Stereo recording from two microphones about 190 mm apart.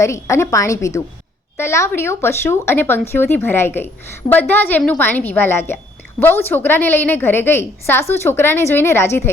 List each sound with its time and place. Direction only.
0.0 s a woman's voice: 15° left (ahead or behind)